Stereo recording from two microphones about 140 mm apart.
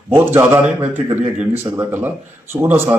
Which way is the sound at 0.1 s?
15° right (ahead or behind).